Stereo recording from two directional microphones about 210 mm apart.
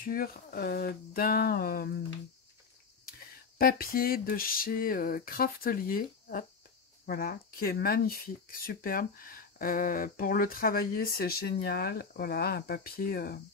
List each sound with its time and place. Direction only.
0.0 s speech: 45° left (ahead or behind)
3.1 s a sound: 45° left (ahead or behind)
7.1 s speech: 45° left (ahead or behind)